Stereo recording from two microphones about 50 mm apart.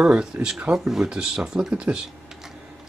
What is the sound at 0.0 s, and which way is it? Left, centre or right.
Speech, centre.